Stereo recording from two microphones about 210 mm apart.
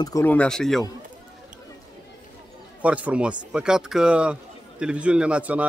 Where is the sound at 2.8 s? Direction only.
5° right (ahead or behind).